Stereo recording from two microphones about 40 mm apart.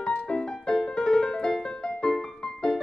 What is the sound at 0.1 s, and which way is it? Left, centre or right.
Music, left.